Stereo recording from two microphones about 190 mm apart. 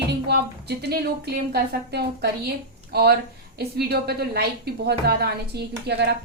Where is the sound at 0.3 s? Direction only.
60° right (ahead or behind).